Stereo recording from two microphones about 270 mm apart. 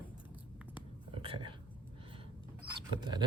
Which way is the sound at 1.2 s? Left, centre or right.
Centre.